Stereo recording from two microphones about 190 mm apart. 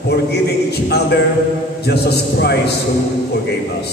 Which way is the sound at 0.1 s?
60° left (ahead or behind).